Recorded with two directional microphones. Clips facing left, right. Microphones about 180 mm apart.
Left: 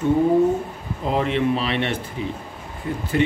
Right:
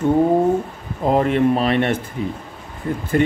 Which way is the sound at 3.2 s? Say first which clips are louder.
Right 3 dB; 50° right (ahead or behind).